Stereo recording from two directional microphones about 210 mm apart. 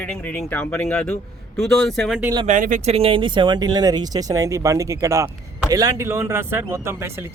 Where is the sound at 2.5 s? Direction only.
35° right (ahead or behind).